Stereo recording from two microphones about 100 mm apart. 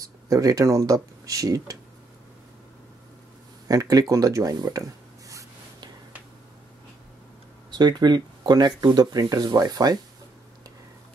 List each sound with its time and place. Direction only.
0.3 s speech: 35° right (ahead or behind)
3.6 s speech: 35° right (ahead or behind)
7.7 s speech: 45° right (ahead or behind)